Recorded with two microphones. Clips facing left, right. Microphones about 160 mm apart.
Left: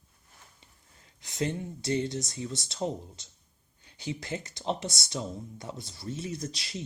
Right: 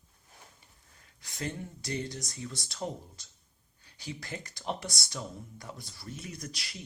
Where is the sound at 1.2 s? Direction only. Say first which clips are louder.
Left 6 dB; 20° left (ahead or behind).